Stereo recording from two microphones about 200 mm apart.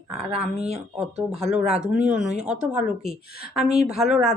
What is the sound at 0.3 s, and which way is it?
Speech, 30° right (ahead or behind).